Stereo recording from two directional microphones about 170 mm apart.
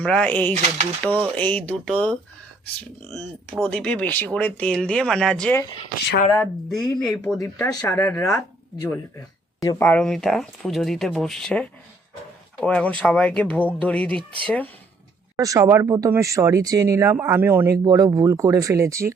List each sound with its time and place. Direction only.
0.0 s speech: 5° left (ahead or behind)
6.8 s speech: 25° left (ahead or behind); by 14.7 s 10° left (ahead or behind)
15.4 s speech: 20° right (ahead or behind)